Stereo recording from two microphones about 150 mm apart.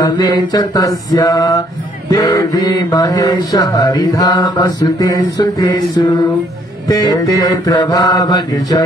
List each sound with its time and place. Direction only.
0.0 s mantra: 25° left (ahead or behind)